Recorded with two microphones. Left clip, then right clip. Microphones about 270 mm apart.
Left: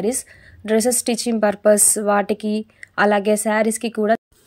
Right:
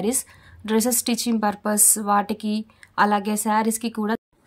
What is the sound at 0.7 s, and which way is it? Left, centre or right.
A woman's voice, centre.